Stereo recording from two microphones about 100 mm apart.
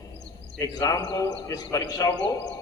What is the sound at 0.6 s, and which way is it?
A man's voice, 35° left (ahead or behind).